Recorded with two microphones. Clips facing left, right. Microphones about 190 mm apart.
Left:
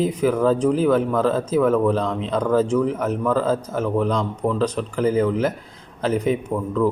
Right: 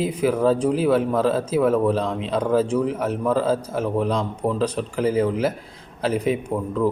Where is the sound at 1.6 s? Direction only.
30° right (ahead or behind).